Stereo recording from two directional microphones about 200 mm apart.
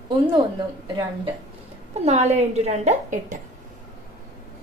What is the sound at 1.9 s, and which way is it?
A woman's voice, 35° right (ahead or behind).